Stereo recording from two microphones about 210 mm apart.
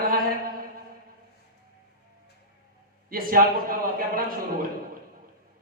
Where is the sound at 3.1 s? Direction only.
45° right (ahead or behind).